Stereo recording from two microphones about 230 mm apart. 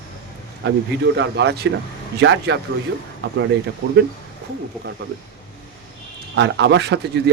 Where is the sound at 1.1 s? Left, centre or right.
Right.